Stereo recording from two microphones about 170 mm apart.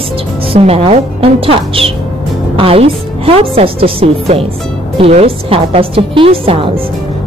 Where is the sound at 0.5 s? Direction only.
35° right (ahead or behind).